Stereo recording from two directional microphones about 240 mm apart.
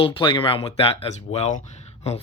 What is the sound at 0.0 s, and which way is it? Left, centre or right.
Speech, left.